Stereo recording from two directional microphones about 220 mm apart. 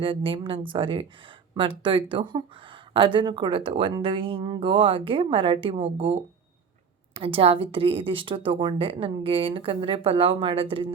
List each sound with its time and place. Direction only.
0.0 s a woman's voice: 25° right (ahead or behind)
7.2 s a woman's voice: 25° right (ahead or behind)